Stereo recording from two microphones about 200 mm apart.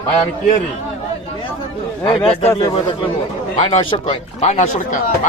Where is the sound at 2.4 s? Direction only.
20° left (ahead or behind).